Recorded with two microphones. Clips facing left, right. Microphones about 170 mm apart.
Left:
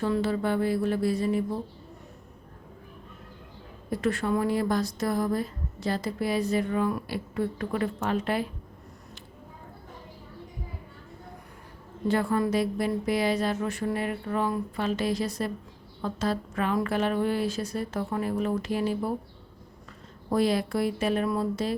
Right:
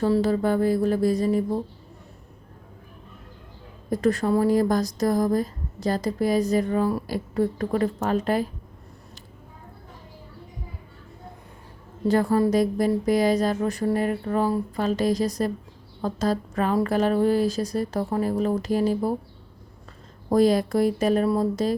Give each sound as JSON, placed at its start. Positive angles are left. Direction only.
{"t": 0.0, "sound": "a woman's voice", "side_deg": -40}
{"t": 3.8, "sound": "a woman's voice", "side_deg": -40}
{"t": 12.0, "sound": "a woman's voice", "side_deg": -40}
{"t": 20.3, "sound": "a woman's voice", "side_deg": -40}